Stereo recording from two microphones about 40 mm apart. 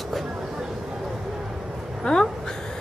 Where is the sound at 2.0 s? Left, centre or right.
Centre.